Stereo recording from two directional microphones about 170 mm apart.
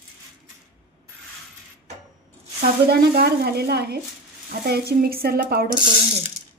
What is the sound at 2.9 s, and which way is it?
A woman's voice, 65° right (ahead or behind).